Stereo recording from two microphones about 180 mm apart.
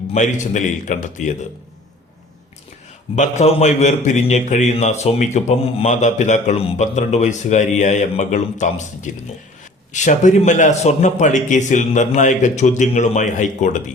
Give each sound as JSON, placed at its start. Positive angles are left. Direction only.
{"t": 0.1, "sound": "a man's voice", "side_deg": 40}
{"t": 3.2, "sound": "a man's voice", "side_deg": 40}